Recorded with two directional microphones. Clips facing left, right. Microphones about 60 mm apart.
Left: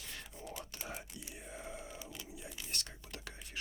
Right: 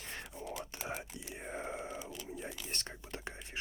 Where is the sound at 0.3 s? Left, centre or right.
Right.